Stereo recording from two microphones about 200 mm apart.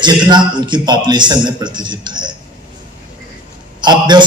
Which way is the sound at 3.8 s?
20° right (ahead or behind).